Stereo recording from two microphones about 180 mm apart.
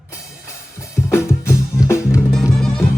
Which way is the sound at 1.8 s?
15° left (ahead or behind).